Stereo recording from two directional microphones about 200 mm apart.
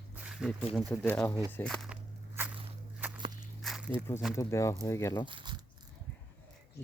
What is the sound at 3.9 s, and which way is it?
Speech, 25° right (ahead or behind).